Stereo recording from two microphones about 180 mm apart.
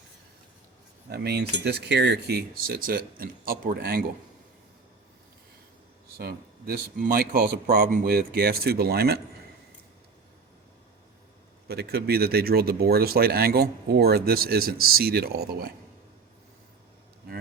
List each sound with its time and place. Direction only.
1.1 s speech: 65° right (ahead or behind)
6.1 s speech: 55° right (ahead or behind)
11.7 s speech: 60° right (ahead or behind)